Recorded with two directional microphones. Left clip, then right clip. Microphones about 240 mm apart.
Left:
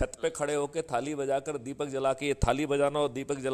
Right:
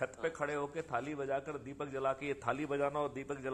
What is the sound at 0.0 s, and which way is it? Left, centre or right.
A man's voice, left.